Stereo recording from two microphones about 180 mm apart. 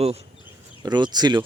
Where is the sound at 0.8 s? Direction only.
25° right (ahead or behind).